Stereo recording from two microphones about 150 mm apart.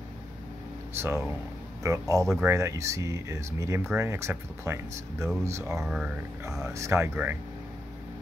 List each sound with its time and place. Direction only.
0.9 s speech: 15° right (ahead or behind)
5.8 s speech: 5° right (ahead or behind)
6.6 s speech: 20° right (ahead or behind)